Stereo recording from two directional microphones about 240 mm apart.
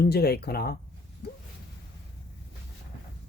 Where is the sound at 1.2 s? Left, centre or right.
Left.